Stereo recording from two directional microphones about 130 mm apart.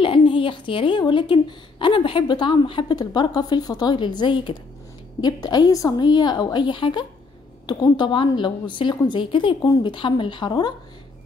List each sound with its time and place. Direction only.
0.0 s speech: 40° left (ahead or behind)